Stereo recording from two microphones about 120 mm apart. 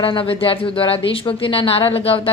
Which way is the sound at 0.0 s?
45° left (ahead or behind).